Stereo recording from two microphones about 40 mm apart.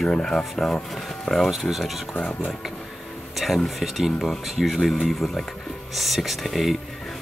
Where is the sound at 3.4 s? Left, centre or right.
Centre.